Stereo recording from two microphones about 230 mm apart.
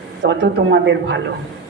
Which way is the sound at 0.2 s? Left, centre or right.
Right.